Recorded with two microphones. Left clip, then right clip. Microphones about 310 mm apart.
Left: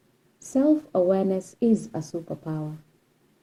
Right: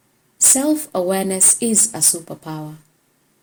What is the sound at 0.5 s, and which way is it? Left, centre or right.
A woman's voice, right.